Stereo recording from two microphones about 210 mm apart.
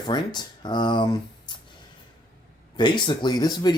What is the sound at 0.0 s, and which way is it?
Speech, 20° left (ahead or behind).